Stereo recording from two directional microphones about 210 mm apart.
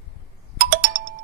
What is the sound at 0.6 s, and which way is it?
Music, 45° right (ahead or behind).